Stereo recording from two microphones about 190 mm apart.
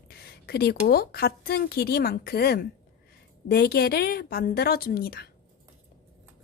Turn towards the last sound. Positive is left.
turn(degrees=55)  # may be behind; listen again after turning